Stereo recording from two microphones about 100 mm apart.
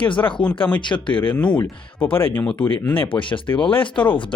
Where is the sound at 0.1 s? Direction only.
55° left (ahead or behind).